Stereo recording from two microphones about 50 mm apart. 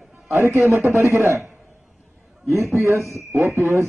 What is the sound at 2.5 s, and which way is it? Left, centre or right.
A man's voice, right.